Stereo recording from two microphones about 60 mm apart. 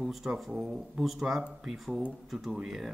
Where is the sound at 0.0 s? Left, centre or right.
Centre.